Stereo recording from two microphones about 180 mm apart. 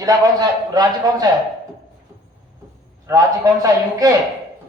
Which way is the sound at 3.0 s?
20° right (ahead or behind).